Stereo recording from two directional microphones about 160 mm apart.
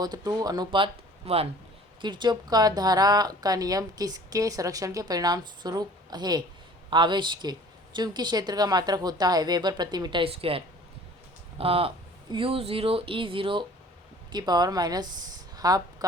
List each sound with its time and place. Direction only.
0.0 s speech: 25° right (ahead or behind)